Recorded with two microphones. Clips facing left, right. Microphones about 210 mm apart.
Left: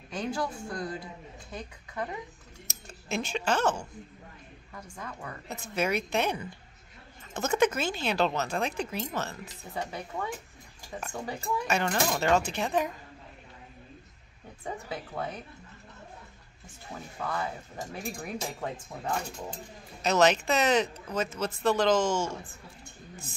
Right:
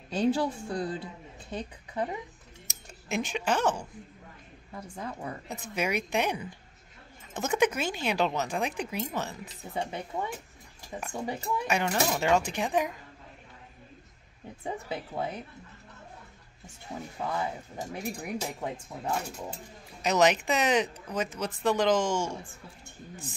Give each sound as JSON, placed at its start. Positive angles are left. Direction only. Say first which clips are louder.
{"t": 0.1, "sound": "a woman's voice", "louder": "right 6 dB", "side_deg": -30}
{"t": 2.7, "sound": "speech", "louder": "right 1 dB", "side_deg": -15}
{"t": 4.7, "sound": "speech", "louder": "right 4 dB", "side_deg": -30}
{"t": 5.5, "sound": "speech", "louder": "left 2 dB", "side_deg": -15}
{"t": 7.3, "sound": "speech", "louder": "left 1 dB", "side_deg": -15}
{"t": 11.1, "sound": "speech", "louder": "right 1 dB", "side_deg": -20}
{"t": 14.6, "sound": "speech", "louder": "right 2 dB", "side_deg": -25}
{"t": 17.2, "sound": "speech", "louder": "right 1 dB", "side_deg": -20}